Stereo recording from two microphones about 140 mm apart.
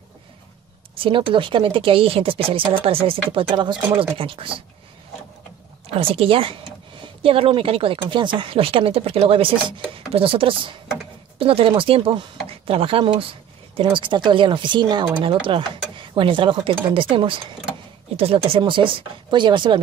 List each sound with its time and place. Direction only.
0.9 s speech: 40° right (ahead or behind)
5.9 s speech: 40° right (ahead or behind)